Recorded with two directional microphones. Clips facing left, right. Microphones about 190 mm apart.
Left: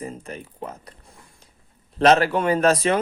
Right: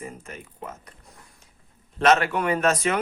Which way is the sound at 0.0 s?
35° left (ahead or behind).